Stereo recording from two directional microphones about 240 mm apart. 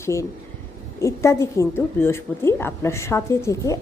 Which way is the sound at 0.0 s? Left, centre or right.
Centre.